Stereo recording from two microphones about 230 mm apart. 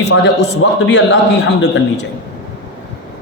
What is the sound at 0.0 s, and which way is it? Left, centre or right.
A man's voice, left.